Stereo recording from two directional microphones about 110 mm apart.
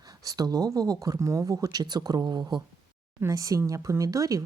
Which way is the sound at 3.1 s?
30° right (ahead or behind).